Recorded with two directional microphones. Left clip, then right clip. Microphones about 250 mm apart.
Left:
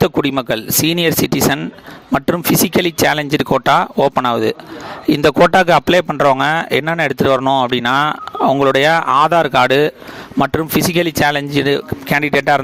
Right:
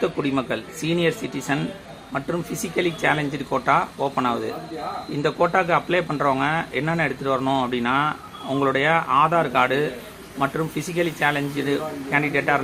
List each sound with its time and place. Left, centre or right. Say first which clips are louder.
0.2 s speech: left 8 dB; left